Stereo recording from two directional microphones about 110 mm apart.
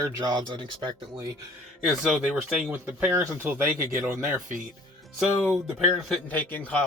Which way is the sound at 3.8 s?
20° right (ahead or behind).